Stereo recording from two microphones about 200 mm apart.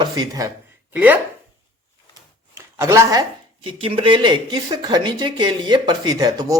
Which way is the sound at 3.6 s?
25° right (ahead or behind).